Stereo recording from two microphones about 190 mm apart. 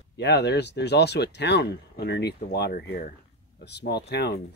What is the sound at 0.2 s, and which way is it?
Speech, 60° left (ahead or behind).